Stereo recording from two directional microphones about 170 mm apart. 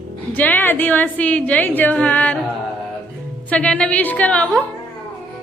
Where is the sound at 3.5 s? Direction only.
5° left (ahead or behind).